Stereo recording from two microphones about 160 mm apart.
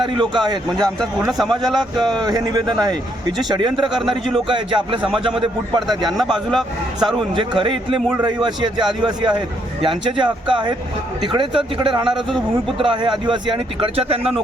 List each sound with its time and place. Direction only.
0.0 s speech: 30° right (ahead or behind)
0.8 s speech: centre (ahead or behind)
2.2 s speech: 25° right (ahead or behind)
6.1 s speech: centre (ahead or behind)
7.3 s speech: 30° right (ahead or behind)